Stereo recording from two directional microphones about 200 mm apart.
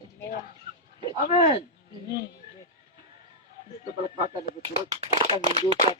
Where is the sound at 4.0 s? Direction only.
25° right (ahead or behind).